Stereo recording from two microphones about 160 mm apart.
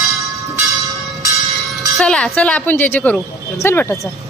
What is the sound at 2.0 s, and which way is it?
Speech, 5° left (ahead or behind).